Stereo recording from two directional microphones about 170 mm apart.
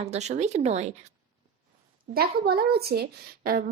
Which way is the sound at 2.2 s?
65° right (ahead or behind).